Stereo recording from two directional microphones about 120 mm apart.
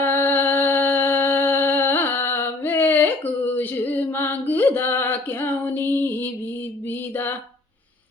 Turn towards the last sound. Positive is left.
turn(degrees=20)  # may be behind; listen again after turning